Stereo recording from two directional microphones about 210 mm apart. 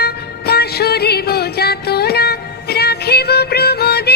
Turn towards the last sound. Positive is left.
turn(degrees=50)  # may be behind; listen again after turning